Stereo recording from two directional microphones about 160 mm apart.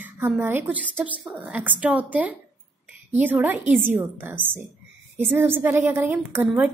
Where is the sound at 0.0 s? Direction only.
15° right (ahead or behind).